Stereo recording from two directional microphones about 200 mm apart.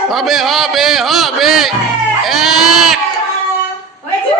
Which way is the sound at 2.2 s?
Centre (ahead or behind).